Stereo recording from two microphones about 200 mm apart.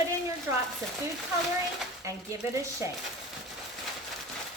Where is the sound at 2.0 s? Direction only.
15° right (ahead or behind).